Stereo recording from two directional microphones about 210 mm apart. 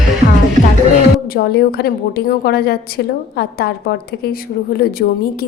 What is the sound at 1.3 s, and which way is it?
A woman's voice, 50° left (ahead or behind).